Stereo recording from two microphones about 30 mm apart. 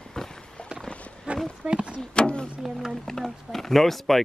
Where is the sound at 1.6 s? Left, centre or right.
Right.